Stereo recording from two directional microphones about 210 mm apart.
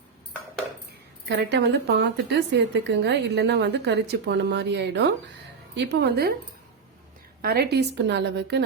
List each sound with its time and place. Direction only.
1.3 s a woman's voice: 50° right (ahead or behind)
7.4 s a woman's voice: 50° right (ahead or behind)